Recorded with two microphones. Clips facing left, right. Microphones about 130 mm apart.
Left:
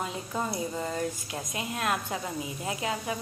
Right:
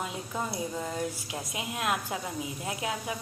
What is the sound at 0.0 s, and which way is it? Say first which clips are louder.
Speech: left 2 dB; 5° right (ahead or behind).